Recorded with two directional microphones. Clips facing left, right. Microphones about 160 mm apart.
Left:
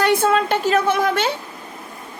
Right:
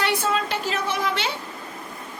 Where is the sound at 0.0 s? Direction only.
50° left (ahead or behind).